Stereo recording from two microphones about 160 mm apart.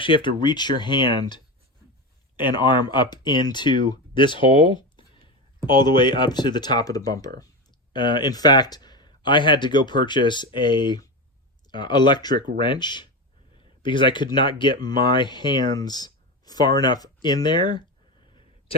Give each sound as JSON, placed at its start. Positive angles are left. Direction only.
{"t": 0.0, "sound": "speech", "side_deg": 30}